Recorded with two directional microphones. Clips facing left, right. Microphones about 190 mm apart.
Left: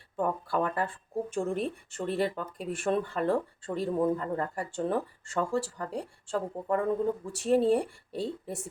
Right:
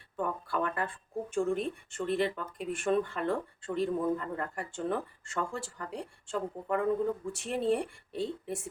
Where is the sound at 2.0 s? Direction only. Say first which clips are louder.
Left 1 dB; 35° left (ahead or behind).